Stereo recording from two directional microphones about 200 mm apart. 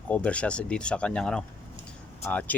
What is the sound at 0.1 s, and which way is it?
Speech, 5° left (ahead or behind).